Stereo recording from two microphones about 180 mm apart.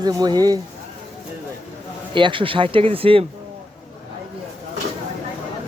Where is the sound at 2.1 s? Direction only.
25° right (ahead or behind).